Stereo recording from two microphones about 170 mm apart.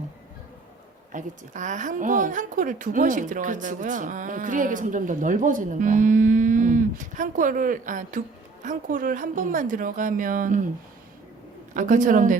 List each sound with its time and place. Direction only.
1.1 s a woman's voice: 45° right (ahead or behind)
11.7 s a woman's voice: 50° right (ahead or behind)